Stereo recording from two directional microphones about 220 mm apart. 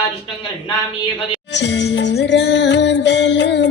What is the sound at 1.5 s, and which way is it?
Music, 50° left (ahead or behind).